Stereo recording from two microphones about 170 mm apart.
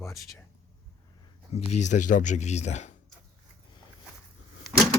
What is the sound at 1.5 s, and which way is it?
Speech, 40° left (ahead or behind).